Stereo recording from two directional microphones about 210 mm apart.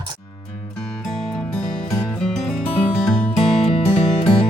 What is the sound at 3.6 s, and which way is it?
Music, 25° left (ahead or behind).